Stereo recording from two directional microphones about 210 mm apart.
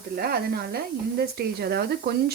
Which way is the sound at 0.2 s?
50° right (ahead or behind).